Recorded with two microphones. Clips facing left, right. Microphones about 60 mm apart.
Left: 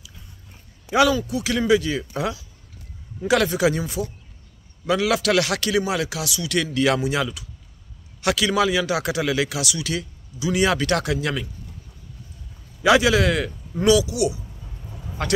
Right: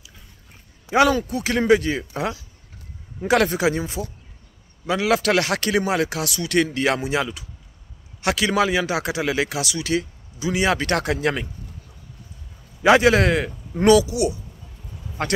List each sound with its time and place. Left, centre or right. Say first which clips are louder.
0.9 s a man's voice: right 1 dB; right
12.8 s speech: right 2 dB; right